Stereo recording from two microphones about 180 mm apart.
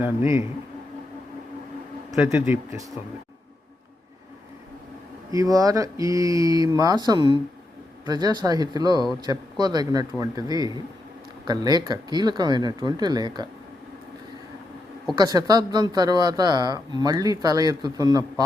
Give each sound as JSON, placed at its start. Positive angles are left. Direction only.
{"t": 2.1, "sound": "a man's voice", "side_deg": -15}
{"t": 5.3, "sound": "speech", "side_deg": -20}
{"t": 15.2, "sound": "speech", "side_deg": -20}